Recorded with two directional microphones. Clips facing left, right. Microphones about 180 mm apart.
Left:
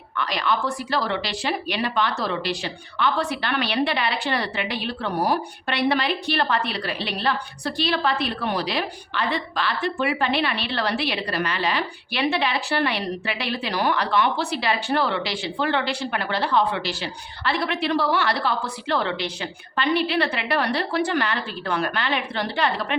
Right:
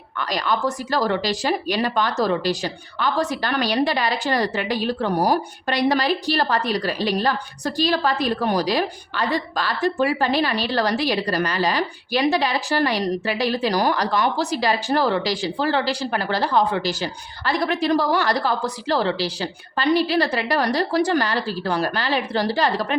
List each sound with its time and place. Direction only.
0.2 s a woman's voice: 40° right (ahead or behind)